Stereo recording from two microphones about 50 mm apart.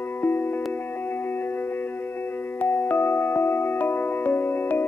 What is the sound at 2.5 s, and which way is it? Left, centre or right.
Music, left.